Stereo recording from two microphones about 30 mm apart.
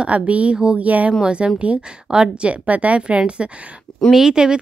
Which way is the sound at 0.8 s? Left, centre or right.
Right.